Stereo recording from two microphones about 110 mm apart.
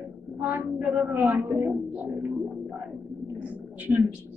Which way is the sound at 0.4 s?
15° right (ahead or behind).